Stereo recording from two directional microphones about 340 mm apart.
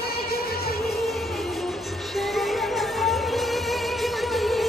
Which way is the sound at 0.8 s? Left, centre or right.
Centre.